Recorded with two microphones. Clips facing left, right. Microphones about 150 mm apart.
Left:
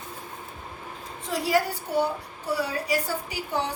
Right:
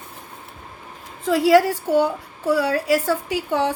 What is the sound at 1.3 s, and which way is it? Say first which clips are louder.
A woman's voice: right 10 dB; 90° right.